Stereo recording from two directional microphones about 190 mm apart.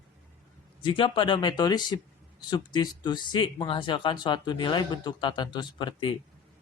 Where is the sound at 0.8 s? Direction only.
25° left (ahead or behind).